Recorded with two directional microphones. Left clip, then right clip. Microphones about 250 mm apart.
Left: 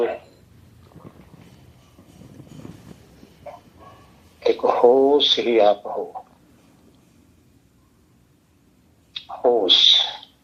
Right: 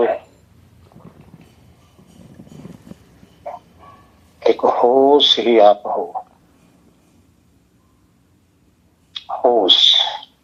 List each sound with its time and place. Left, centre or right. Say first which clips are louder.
4.4 s speech: right 3 dB; right
9.1 s bird: right 4 dB; right